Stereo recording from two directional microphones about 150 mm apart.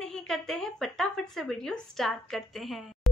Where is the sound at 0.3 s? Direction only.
5° left (ahead or behind).